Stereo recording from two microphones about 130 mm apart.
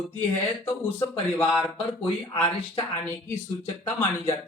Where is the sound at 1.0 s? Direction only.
15° left (ahead or behind).